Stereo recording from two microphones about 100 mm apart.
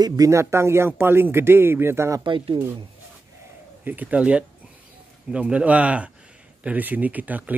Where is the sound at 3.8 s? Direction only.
15° right (ahead or behind).